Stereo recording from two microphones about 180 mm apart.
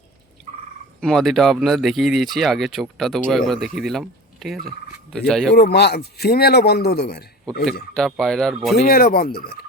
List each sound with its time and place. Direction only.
1.0 s speech: centre (ahead or behind)
5.5 s a man's voice: 65° left (ahead or behind)
7.9 s speech: centre (ahead or behind)
8.9 s a man's voice: 55° left (ahead or behind)